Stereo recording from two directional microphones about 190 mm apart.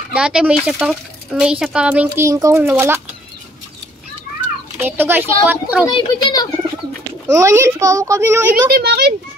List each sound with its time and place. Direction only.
0.1 s speech: 5° right (ahead or behind)
4.7 s a child's voice: 10° right (ahead or behind)
5.9 s speech: 20° left (ahead or behind)
7.3 s a child's voice: 15° right (ahead or behind)
8.6 s speech: 55° right (ahead or behind)